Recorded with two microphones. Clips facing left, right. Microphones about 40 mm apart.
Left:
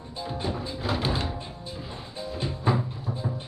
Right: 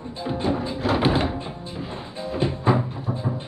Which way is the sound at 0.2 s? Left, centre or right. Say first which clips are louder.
Right 7 dB; right.